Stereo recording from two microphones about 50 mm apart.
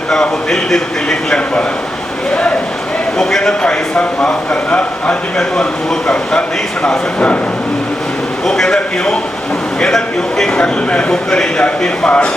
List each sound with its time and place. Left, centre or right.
0.1 s speech: centre
3.2 s speech: centre
3.6 s speech: left
8.4 s speech: centre